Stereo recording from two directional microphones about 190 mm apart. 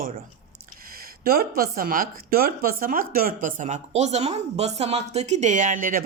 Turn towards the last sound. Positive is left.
turn(degrees=-45)  # may be behind; listen again after turning